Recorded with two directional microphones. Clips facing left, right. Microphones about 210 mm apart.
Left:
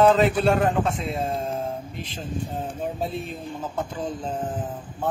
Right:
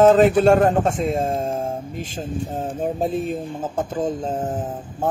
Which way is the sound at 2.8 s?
45° right (ahead or behind).